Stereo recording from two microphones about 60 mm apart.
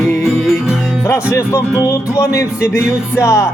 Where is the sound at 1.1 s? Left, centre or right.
Left.